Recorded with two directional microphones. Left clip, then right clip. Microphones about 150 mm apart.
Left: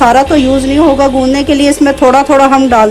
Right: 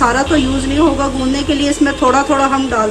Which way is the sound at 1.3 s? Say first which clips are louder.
Left 7 dB; 45° left (ahead or behind).